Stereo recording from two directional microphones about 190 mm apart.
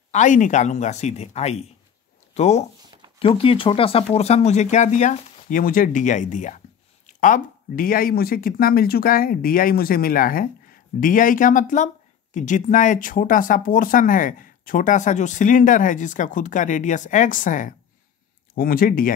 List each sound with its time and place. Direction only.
0.1 s speech: 40° left (ahead or behind)